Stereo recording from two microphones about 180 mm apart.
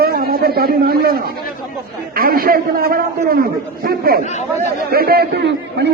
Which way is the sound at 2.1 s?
55° right (ahead or behind).